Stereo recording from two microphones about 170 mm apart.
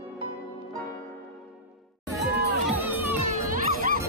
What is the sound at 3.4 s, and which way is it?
Music, 55° right (ahead or behind).